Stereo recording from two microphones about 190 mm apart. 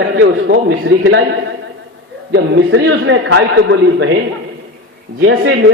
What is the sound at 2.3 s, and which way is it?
A man's voice, 70° right (ahead or behind).